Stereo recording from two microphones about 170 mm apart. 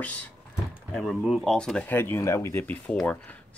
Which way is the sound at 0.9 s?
Centre (ahead or behind).